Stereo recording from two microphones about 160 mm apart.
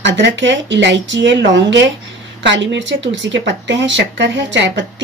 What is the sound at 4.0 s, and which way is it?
Speech, 90° right.